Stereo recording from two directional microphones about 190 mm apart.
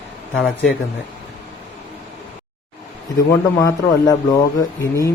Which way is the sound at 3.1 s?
20° left (ahead or behind).